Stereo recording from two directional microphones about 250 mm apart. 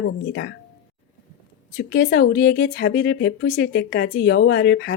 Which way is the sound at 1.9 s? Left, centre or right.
Left.